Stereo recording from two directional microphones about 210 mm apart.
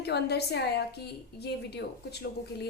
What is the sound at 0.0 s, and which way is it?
Speech, 50° left (ahead or behind).